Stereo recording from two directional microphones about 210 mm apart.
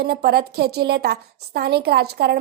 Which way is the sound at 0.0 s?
50° right (ahead or behind).